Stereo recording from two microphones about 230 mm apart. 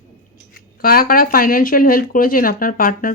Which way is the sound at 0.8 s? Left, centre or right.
Left.